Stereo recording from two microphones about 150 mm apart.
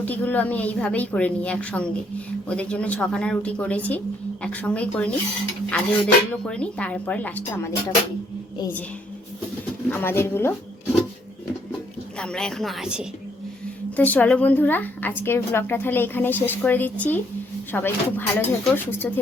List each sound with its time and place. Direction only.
0.0 s a woman's voice: 10° left (ahead or behind)
9.9 s a woman's voice: 15° left (ahead or behind)
12.2 s a woman's voice: 5° left (ahead or behind)
13.9 s a woman's voice: 10° left (ahead or behind)